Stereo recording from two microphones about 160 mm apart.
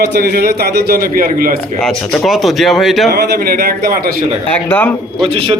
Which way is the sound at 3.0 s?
70° right (ahead or behind).